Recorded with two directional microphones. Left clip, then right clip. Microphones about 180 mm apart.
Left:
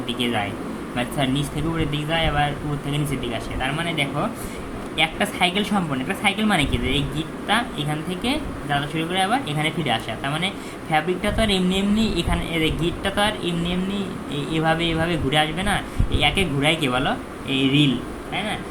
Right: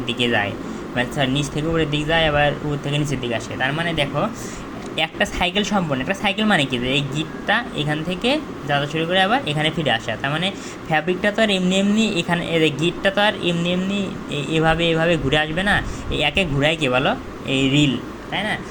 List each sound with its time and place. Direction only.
0.1 s speech: 25° right (ahead or behind)